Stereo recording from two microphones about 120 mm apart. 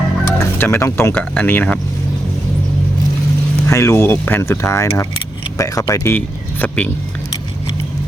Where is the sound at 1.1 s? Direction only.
10° left (ahead or behind).